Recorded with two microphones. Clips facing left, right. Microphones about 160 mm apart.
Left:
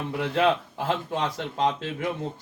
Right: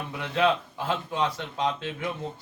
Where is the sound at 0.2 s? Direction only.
45° left (ahead or behind).